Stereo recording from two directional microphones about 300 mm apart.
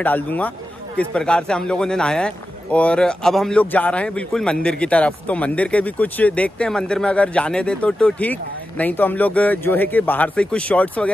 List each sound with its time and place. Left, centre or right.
0.0 s speech: centre